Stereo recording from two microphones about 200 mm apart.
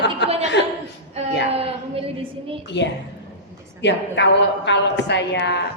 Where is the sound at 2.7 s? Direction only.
60° left (ahead or behind).